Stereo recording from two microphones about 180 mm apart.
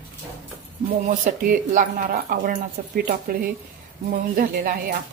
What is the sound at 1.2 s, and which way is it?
Speech, 50° right (ahead or behind).